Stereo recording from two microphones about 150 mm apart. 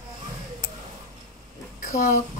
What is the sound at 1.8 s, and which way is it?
Speech, 60° left (ahead or behind).